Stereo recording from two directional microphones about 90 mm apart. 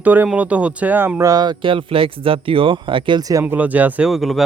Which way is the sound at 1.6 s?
75° right (ahead or behind).